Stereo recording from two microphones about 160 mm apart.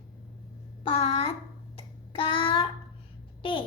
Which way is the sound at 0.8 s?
35° left (ahead or behind).